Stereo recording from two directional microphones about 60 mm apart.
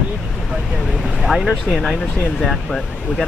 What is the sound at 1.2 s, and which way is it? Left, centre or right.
Speech, centre.